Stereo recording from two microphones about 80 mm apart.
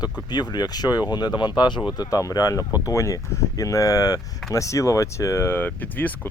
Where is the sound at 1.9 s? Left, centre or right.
Left.